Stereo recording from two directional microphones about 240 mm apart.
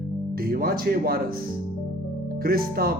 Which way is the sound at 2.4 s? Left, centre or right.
Right.